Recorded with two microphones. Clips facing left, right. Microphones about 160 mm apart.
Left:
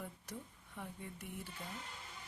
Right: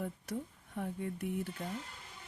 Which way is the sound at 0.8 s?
55° right (ahead or behind).